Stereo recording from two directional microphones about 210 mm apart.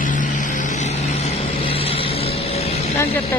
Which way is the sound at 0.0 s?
40° left (ahead or behind).